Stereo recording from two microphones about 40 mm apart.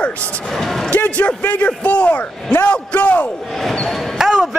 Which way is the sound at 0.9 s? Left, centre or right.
Left.